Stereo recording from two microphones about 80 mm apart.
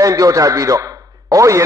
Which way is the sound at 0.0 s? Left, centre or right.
Right.